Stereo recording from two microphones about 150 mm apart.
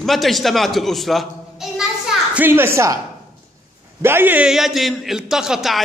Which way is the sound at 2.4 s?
15° right (ahead or behind).